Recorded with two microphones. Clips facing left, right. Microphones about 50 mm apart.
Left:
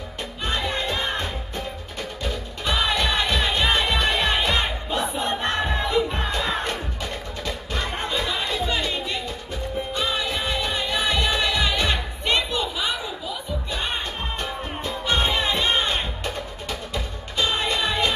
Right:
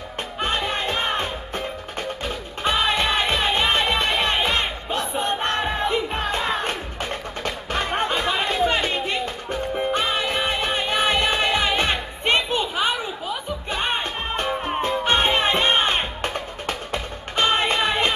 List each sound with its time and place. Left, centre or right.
0.4 s music: right